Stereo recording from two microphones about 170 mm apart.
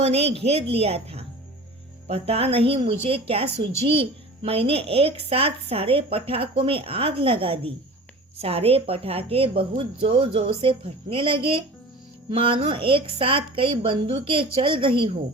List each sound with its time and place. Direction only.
0.0 s a woman's voice: 40° right (ahead or behind)